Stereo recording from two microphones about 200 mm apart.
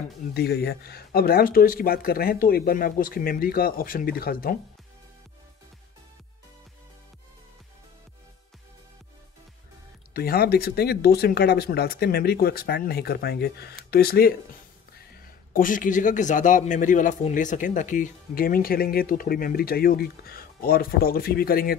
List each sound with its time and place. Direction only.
0.3 s a man's voice: 55° left (ahead or behind)
10.1 s a man's voice: 50° left (ahead or behind)